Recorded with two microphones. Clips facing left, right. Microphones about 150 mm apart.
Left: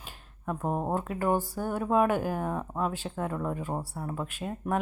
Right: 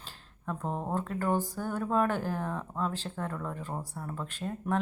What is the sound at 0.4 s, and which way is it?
A woman's voice, 10° left (ahead or behind).